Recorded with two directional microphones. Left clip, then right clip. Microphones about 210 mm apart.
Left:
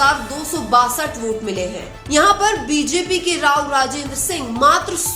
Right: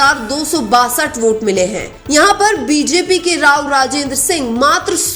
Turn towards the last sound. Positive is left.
turn(degrees=-25)  # may be behind; listen again after turning